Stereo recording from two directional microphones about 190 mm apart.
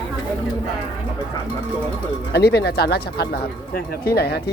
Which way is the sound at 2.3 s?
60° left (ahead or behind).